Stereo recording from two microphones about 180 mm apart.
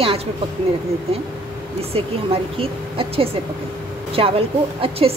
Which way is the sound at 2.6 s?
30° right (ahead or behind).